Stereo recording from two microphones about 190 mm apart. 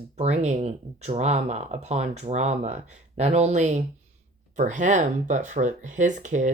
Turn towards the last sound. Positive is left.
turn(degrees=-40)  # may be behind; listen again after turning